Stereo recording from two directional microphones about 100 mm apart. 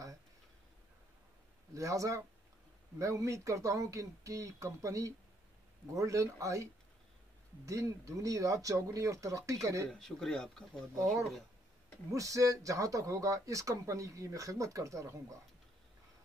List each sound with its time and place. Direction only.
1.7 s speech: 35° right (ahead or behind)
9.8 s speech: 5° left (ahead or behind)
12.1 s speech: 35° right (ahead or behind)